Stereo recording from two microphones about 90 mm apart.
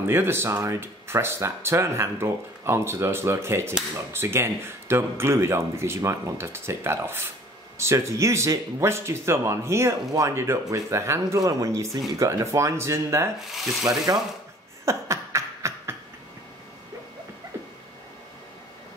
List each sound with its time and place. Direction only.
0.0 s speech: 25° right (ahead or behind)
13.4 s speech: centre (ahead or behind)
13.8 s ratchet: 40° right (ahead or behind)
14.9 s beatboxing: 35° right (ahead or behind)